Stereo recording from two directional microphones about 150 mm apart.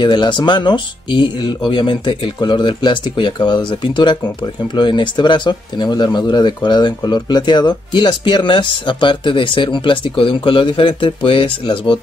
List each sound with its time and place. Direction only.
0.0 s speech: 30° left (ahead or behind)